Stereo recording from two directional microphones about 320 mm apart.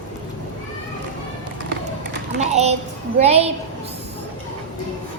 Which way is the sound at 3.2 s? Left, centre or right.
Centre.